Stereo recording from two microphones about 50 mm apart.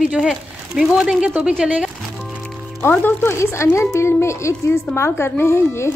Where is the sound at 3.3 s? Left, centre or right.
Left.